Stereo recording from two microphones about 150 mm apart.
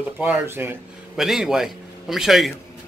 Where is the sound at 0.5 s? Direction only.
15° right (ahead or behind).